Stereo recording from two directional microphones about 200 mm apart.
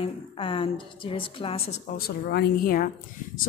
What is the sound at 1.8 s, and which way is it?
A woman's voice, 50° left (ahead or behind).